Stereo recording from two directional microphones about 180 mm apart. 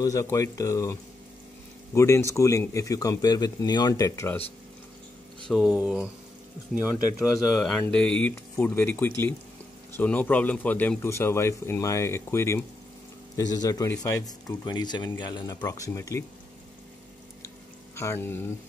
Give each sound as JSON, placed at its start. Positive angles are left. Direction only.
{"t": 0.0, "sound": "a man's voice", "side_deg": 20}
{"t": 2.0, "sound": "a man's voice", "side_deg": 15}
{"t": 5.5, "sound": "speech", "side_deg": -5}
{"t": 7.5, "sound": "a man's voice", "side_deg": 5}
{"t": 17.9, "sound": "a man's voice", "side_deg": 15}